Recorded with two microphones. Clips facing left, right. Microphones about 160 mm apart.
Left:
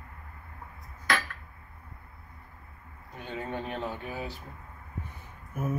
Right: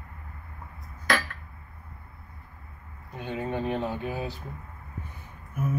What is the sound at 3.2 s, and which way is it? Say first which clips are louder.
Speech: right 5 dB; 15° right (ahead or behind).